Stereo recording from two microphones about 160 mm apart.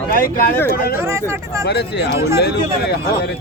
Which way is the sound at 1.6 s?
90° left.